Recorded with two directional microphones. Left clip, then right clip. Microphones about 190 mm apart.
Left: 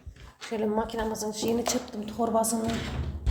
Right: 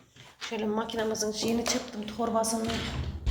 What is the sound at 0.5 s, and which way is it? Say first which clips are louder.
A woman's voice: left 3 dB; 15° left (ahead or behind).